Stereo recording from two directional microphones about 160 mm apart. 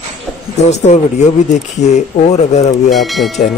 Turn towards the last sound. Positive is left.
turn(degrees=0)  # may be behind; listen again after turning